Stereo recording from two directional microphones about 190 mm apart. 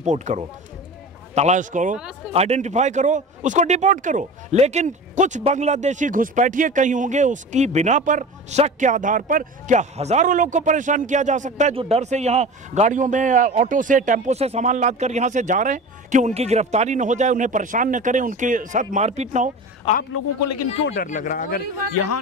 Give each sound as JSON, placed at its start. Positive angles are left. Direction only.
{"t": 0.0, "sound": "speech", "side_deg": -40}
{"t": 19.9, "sound": "a man's voice", "side_deg": 30}
{"t": 21.0, "sound": "speech", "side_deg": 45}